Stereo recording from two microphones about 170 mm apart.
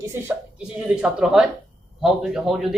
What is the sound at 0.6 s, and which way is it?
A man's voice, 5° right (ahead or behind).